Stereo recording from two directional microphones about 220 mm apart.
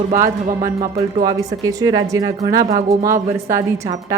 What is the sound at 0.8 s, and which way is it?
A woman's voice, 20° right (ahead or behind).